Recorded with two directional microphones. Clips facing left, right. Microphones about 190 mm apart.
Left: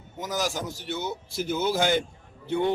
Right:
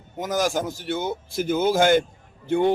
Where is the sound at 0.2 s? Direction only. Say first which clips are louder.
Right 6 dB; 50° right (ahead or behind).